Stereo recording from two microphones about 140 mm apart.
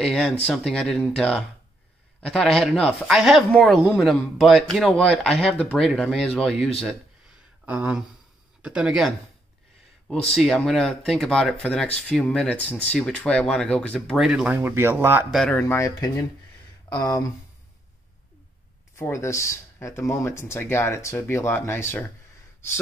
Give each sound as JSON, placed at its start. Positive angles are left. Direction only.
{"t": 0.0, "sound": "speech", "side_deg": 5}
{"t": 7.6, "sound": "speech", "side_deg": -10}
{"t": 15.3, "sound": "speech", "side_deg": 5}
{"t": 15.6, "sound": "speech", "side_deg": 25}
{"t": 18.9, "sound": "speech", "side_deg": 20}